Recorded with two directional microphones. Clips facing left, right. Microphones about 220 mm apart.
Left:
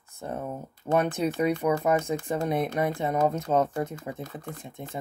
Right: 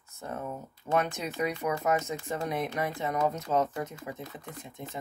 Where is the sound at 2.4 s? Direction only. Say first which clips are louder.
Left 4 dB; 50° left (ahead or behind).